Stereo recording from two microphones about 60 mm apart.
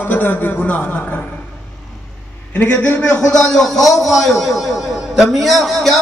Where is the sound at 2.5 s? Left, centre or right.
Left; by 6.0 s centre.